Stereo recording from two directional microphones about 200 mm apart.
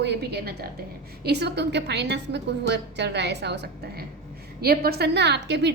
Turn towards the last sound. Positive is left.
turn(degrees=-60)  # may be behind; listen again after turning